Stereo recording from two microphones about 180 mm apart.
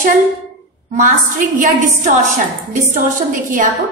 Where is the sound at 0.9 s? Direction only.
45° right (ahead or behind).